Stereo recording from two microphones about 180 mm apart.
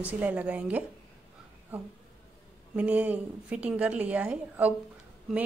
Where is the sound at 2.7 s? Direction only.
10° right (ahead or behind).